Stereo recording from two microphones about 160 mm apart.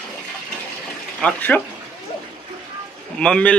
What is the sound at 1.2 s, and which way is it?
Speech, 10° left (ahead or behind).